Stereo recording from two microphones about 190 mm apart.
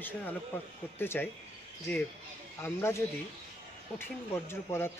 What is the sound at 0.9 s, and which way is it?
Speech, 10° left (ahead or behind).